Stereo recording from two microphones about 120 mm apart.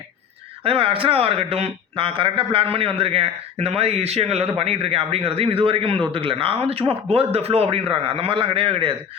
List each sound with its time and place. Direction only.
0.6 s a man's voice: 50° right (ahead or behind)